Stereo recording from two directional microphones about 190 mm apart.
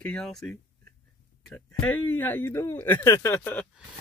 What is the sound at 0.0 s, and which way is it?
Speech, 5° left (ahead or behind).